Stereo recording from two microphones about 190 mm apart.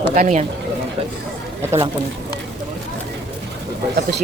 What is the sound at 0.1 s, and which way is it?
Speech, 40° right (ahead or behind).